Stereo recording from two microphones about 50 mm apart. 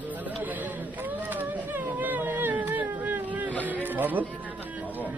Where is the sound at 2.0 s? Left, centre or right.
Right.